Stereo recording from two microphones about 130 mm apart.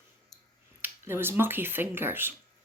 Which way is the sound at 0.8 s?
20° right (ahead or behind).